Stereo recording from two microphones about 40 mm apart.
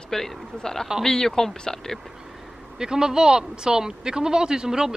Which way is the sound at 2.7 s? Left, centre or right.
Centre.